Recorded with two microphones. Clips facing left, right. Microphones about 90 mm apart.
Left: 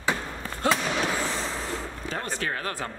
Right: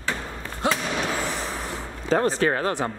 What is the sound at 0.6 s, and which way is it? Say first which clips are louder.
Fireworks: even; 20° right (ahead or behind).